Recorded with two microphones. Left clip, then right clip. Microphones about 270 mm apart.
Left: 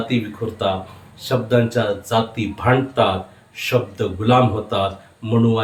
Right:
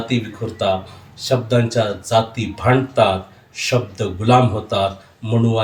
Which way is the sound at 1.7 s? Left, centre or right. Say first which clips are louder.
Right 2 dB; centre.